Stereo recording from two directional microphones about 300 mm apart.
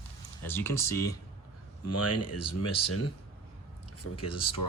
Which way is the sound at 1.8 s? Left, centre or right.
Left.